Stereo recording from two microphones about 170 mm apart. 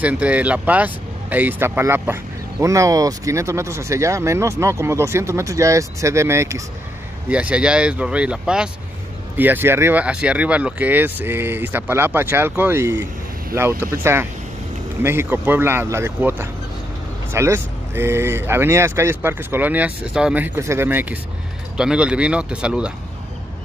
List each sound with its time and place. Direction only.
0.0 s speech: 10° right (ahead or behind)